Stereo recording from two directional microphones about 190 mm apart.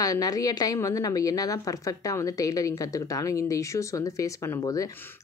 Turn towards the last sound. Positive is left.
turn(degrees=15)  # may be behind; listen again after turning